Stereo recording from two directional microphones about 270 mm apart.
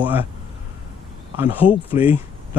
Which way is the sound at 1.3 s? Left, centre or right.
Centre.